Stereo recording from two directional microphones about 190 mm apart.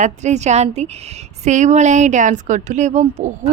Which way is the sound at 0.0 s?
40° right (ahead or behind).